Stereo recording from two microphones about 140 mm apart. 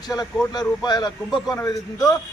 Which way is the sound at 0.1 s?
25° left (ahead or behind).